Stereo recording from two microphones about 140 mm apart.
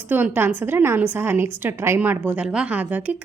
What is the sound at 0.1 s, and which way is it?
A woman's voice, 15° right (ahead or behind).